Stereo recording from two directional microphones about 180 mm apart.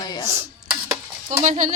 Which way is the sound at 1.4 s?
40° right (ahead or behind).